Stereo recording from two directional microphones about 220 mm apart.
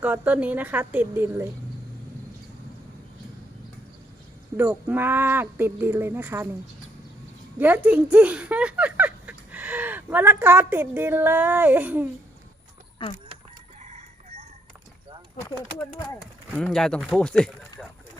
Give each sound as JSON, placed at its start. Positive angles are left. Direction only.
{"t": 0.0, "sound": "speech", "side_deg": -5}
{"t": 4.5, "sound": "speech", "side_deg": -5}
{"t": 7.6, "sound": "speech", "side_deg": -5}
{"t": 13.8, "sound": "chicken", "side_deg": -30}
{"t": 16.0, "sound": "speech", "side_deg": 5}